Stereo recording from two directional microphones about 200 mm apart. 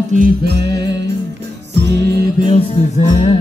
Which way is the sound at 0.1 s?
50° right (ahead or behind).